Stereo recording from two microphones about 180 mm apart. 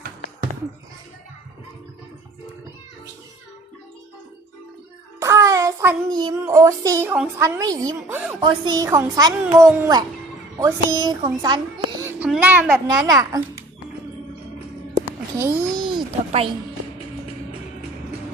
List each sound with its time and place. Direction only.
5.2 s a child's voice: 15° right (ahead or behind)
8.0 s a child's voice: 5° right (ahead or behind)
8.4 s a child's voice: 25° right (ahead or behind)
12.0 s a child's voice: 10° right (ahead or behind)
15.7 s a sound: 25° right (ahead or behind)